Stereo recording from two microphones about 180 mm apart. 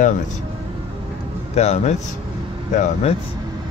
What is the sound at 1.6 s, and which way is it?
Speech, 35° left (ahead or behind).